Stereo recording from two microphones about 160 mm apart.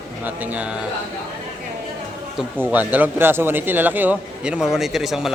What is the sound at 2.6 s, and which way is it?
A man's voice, 10° right (ahead or behind).